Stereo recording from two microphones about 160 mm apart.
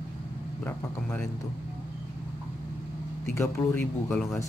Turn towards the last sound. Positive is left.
turn(degrees=10)  # may be behind; listen again after turning